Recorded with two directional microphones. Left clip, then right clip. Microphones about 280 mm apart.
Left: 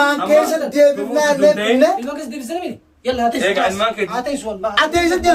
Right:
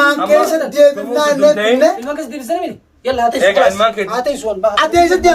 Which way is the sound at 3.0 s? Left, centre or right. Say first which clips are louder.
Right 4 dB; centre.